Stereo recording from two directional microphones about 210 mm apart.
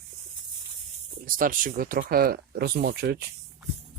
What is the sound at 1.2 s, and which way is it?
Speech, 40° right (ahead or behind).